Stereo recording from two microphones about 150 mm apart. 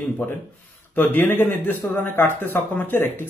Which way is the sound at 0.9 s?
15° left (ahead or behind).